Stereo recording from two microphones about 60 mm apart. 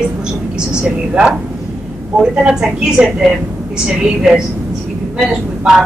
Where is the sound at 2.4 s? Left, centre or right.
Centre.